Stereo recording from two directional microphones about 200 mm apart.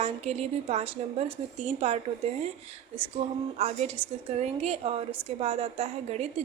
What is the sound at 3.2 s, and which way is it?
A woman's voice, 35° right (ahead or behind).